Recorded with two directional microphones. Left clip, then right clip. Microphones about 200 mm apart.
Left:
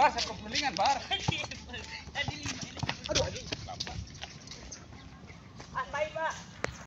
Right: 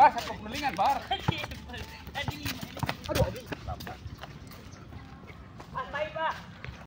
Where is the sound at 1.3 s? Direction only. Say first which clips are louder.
Even; 20° right (ahead or behind).